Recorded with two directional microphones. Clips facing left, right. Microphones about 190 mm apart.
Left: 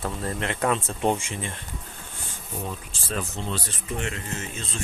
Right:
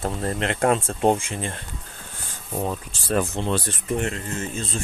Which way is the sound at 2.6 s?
60° right (ahead or behind).